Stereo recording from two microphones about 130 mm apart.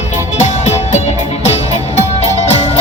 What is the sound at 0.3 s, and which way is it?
Music, 60° left (ahead or behind).